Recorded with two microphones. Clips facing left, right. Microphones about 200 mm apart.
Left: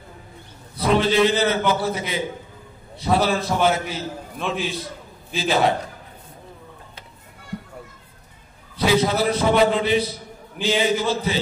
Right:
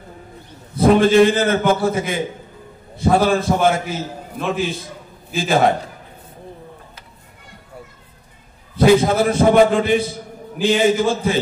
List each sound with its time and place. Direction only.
0.7 s a man's voice: 50° right (ahead or behind)
5.3 s a man's voice: 50° right (ahead or behind)
8.7 s a man's voice: 50° right (ahead or behind)